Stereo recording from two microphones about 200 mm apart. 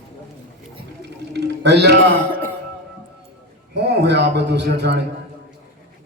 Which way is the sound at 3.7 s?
55° right (ahead or behind).